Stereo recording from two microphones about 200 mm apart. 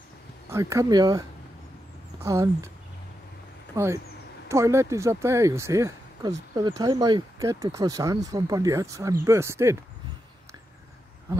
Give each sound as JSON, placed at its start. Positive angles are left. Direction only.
{"t": 0.5, "sound": "speech", "side_deg": -15}
{"t": 2.2, "sound": "speech", "side_deg": -15}
{"t": 3.7, "sound": "speech", "side_deg": -15}